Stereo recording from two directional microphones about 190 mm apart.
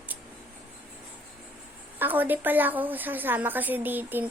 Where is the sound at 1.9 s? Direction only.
10° right (ahead or behind).